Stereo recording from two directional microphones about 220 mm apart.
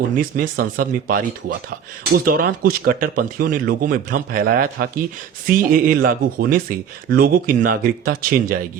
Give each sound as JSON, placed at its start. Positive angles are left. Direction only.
{"t": 0.2, "sound": "speech", "side_deg": -40}